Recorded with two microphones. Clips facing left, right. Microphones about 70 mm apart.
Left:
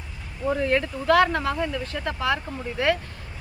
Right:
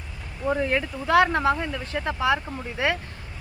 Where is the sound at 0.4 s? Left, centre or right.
Centre.